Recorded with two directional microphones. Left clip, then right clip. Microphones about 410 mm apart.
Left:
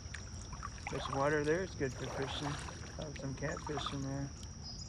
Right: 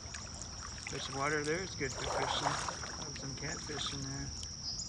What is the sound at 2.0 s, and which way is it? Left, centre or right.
Speech, right.